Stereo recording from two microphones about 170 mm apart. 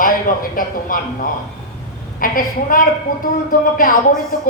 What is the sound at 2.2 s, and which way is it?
A woman's voice, 55° left (ahead or behind).